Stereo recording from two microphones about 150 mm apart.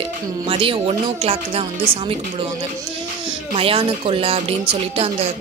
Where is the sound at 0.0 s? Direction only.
35° right (ahead or behind).